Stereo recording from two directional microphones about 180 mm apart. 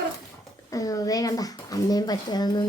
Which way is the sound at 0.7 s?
20° left (ahead or behind).